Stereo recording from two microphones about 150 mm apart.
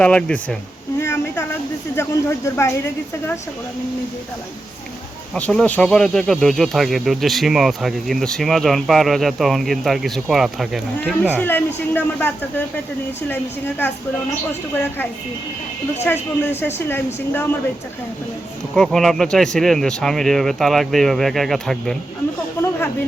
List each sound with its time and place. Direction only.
0.0 s a woman's voice: 5° left (ahead or behind)
0.9 s a sound: 15° left (ahead or behind)
2.0 s a woman's voice: 20° left (ahead or behind)
5.3 s speech: centre (ahead or behind)
11.3 s a woman's voice: 15° left (ahead or behind)
16.1 s a woman's voice: 10° left (ahead or behind)
18.7 s speech: centre (ahead or behind)